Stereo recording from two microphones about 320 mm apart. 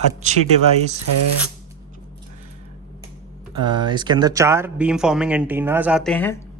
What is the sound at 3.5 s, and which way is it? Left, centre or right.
Speech, centre.